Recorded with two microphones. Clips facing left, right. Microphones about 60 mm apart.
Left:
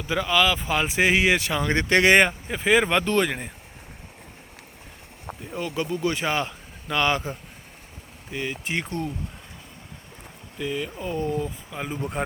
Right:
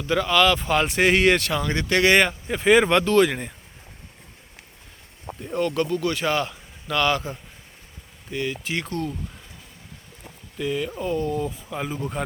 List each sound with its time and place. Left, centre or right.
0.1 s speech: centre
1.6 s speech: left
2.5 s speech: centre
5.4 s speech: centre
10.6 s speech: centre